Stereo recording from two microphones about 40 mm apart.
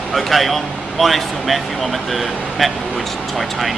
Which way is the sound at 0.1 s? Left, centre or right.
Centre.